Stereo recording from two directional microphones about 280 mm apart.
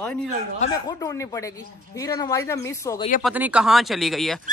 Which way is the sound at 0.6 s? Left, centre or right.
Centre.